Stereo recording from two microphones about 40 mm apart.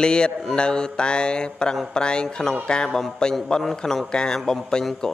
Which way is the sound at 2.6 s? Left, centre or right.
Left.